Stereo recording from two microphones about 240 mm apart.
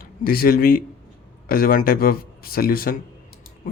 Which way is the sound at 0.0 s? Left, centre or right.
Left.